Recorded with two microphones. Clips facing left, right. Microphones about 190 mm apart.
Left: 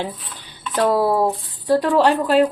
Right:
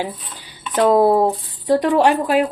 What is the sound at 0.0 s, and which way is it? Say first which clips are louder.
Speech: right 1 dB; 10° right (ahead or behind).